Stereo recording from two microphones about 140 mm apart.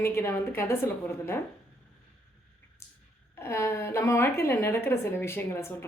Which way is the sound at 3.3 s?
15° left (ahead or behind).